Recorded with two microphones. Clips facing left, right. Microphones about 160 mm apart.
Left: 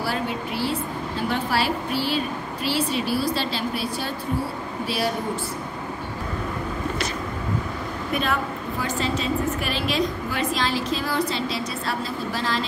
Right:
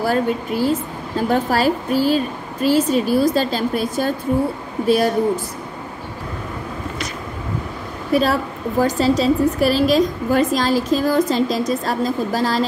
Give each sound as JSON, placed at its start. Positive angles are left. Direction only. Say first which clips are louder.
{"t": 0.0, "sound": "a woman's voice", "louder": "right 8 dB", "side_deg": -45}
{"t": 8.1, "sound": "a woman's voice", "louder": "right 8 dB", "side_deg": -35}